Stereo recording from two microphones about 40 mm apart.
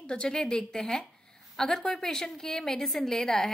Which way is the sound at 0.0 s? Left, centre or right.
Left.